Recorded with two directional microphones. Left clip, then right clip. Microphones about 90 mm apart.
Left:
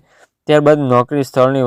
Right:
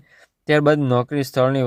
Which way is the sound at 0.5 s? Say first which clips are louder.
Left 6 dB; 25° left (ahead or behind).